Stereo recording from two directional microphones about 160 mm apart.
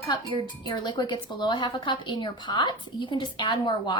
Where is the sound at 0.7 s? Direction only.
30° left (ahead or behind).